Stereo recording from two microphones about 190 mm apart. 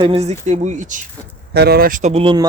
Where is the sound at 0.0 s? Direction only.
30° right (ahead or behind).